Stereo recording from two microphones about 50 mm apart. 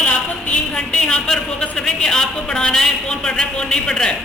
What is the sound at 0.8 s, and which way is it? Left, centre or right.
A man's voice, centre.